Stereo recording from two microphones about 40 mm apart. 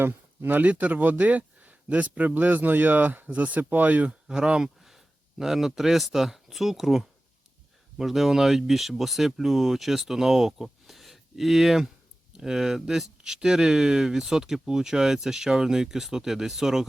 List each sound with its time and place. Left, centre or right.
0.0 s speech: right
0.6 s speech: right
3.3 s speech: right
4.1 s speech: right
4.8 s speech: centre